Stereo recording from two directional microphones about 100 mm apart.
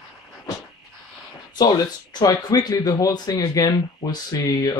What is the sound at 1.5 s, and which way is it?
Speech, 45° left (ahead or behind).